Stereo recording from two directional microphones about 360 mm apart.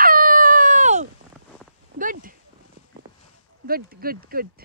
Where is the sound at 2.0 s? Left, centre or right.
Right.